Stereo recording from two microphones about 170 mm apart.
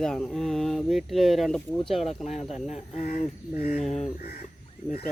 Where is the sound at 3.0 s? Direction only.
40° left (ahead or behind).